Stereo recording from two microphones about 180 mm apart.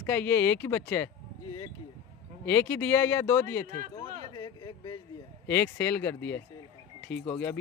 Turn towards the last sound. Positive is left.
turn(degrees=10)  # may be behind; listen again after turning